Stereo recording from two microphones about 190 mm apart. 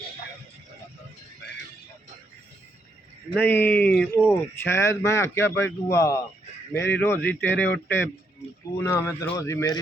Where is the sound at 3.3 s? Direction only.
10° left (ahead or behind).